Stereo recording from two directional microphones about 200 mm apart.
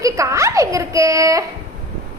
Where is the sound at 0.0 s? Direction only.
15° right (ahead or behind).